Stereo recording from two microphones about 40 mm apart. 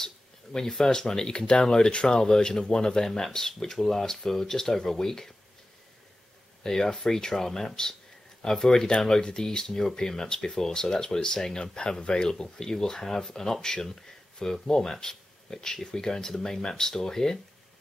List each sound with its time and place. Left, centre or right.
0.0 s speech: centre
6.6 s speech: centre